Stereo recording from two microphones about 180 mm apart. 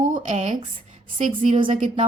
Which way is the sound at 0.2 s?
40° right (ahead or behind).